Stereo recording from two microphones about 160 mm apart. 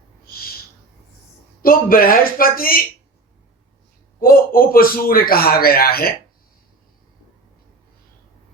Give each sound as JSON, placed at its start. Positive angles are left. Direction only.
{"t": 0.3, "sound": "owl", "side_deg": 70}
{"t": 1.6, "sound": "speech", "side_deg": 65}
{"t": 4.2, "sound": "a man's voice", "side_deg": 65}